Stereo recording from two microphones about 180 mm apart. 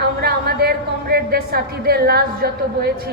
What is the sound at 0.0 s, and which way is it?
A woman's voice, 60° right (ahead or behind).